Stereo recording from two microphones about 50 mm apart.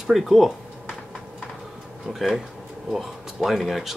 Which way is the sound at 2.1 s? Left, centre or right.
Centre.